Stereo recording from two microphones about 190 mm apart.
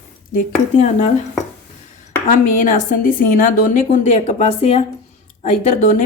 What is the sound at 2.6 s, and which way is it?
A woman's voice, 45° left (ahead or behind).